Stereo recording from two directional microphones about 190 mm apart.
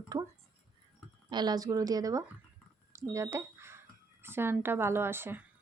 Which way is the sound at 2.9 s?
15° right (ahead or behind).